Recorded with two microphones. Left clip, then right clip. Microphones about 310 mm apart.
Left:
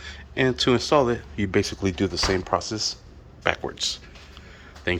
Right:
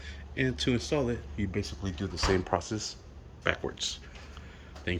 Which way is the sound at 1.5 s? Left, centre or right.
Left.